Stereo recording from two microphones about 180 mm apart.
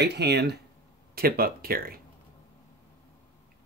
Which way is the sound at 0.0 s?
65° right (ahead or behind).